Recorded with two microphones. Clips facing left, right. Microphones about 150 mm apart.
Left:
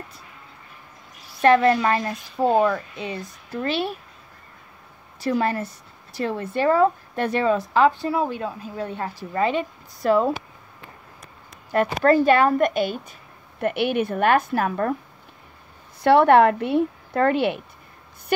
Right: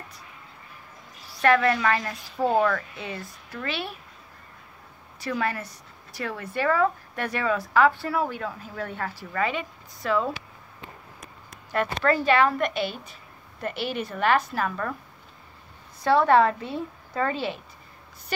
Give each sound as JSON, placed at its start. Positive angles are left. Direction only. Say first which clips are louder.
{"t": 1.3, "sound": "a woman's voice", "louder": "left 5 dB", "side_deg": 25}
{"t": 3.5, "sound": "a woman's voice", "louder": "left 7 dB", "side_deg": 30}
{"t": 5.2, "sound": "a woman's voice", "louder": "left 6 dB", "side_deg": 30}
{"t": 12.0, "sound": "a woman's voice", "louder": "left 5 dB", "side_deg": 45}
{"t": 13.6, "sound": "a woman's voice", "louder": "left 8 dB", "side_deg": 60}
{"t": 16.0, "sound": "speech", "louder": "left 5 dB", "side_deg": 65}